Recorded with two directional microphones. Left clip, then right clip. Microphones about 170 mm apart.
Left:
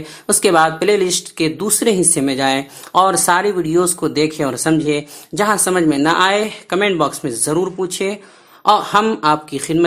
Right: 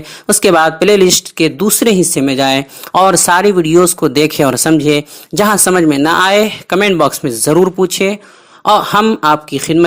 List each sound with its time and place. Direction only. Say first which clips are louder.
0.3 s speech: right 4 dB; 35° right (ahead or behind)